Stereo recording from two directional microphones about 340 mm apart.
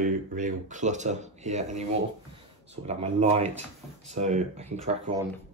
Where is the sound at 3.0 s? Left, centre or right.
Centre.